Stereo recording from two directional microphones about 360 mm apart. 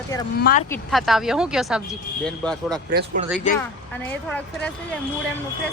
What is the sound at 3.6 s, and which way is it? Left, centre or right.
A man's voice, centre.